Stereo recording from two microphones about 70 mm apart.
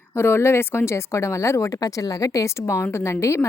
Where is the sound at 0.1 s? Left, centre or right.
Left.